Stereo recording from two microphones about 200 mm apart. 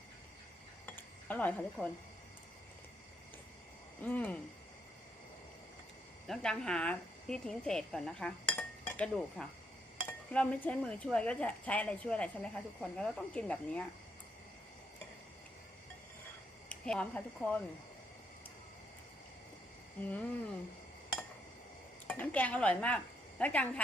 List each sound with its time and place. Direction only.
0.9 s a sound: 10° left (ahead or behind)
4.0 s speech: 5° left (ahead or behind)
6.2 s a woman's voice: centre (ahead or behind)
16.6 s speech: 5° left (ahead or behind)
20.0 s speech: 5° left (ahead or behind)
22.0 s speech: 5° left (ahead or behind)